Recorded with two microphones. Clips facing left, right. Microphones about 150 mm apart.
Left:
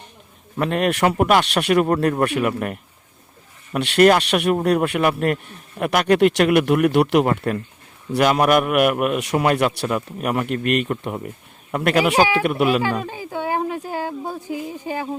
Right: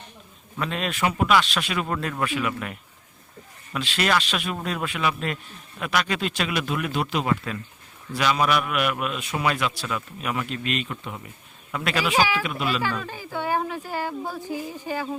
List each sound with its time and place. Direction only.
0.5 s a man's voice: 55° left (ahead or behind)
1.0 s a man's voice: 50° left (ahead or behind)
3.8 s a man's voice: 55° left (ahead or behind)
7.3 s a man's voice: 55° left (ahead or behind)
13.1 s speech: 20° left (ahead or behind)